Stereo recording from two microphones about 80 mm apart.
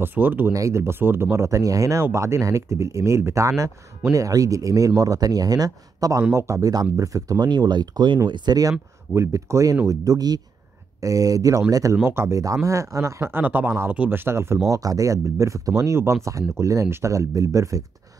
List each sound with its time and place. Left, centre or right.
0.0 s speech: right
0.5 s speech: right
7.4 s speech: right
8.3 s speech: right
9.1 s speech: right
12.0 s speech: right
13.2 s speech: right
14.7 s speech: right